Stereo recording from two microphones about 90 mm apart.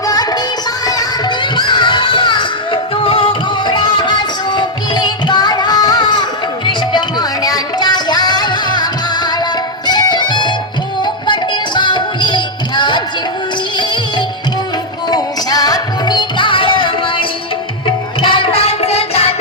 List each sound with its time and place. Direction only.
0.0 s music: 45° left (ahead or behind)
2.7 s music: 90° left; by 14.3 s 65° left (ahead or behind)
15.1 s music: 45° left (ahead or behind); by 18.6 s 70° left (ahead or behind)